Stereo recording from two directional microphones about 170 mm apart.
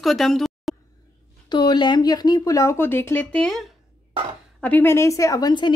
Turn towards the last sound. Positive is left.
turn(degrees=25)  # may be behind; listen again after turning